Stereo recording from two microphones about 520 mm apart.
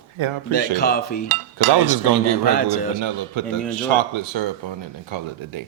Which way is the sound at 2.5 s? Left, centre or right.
Centre.